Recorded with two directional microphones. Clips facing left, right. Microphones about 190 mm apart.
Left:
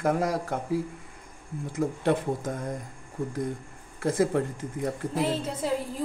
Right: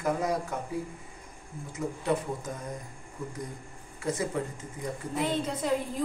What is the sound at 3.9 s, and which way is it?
Speech, 55° left (ahead or behind).